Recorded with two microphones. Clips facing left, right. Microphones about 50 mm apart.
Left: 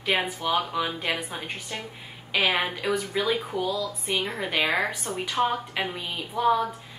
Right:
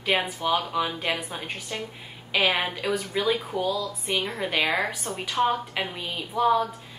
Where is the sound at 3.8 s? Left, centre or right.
Right.